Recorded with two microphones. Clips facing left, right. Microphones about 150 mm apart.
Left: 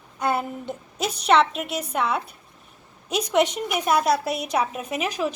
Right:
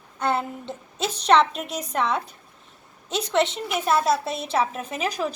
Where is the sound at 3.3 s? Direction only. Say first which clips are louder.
Left 1 dB; 15° left (ahead or behind).